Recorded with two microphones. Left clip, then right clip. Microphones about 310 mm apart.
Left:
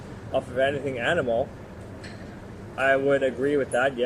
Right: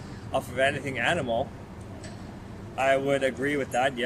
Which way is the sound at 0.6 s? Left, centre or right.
Centre.